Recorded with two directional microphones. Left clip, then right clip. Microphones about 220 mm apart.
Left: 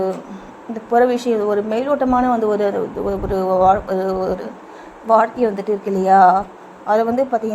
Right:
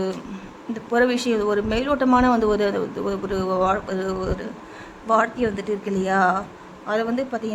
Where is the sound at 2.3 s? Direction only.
25° right (ahead or behind).